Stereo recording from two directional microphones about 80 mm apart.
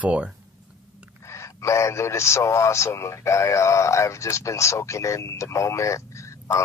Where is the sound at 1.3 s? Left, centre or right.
Left.